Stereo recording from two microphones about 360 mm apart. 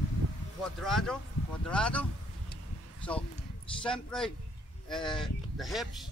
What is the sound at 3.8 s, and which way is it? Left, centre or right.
Speech, centre.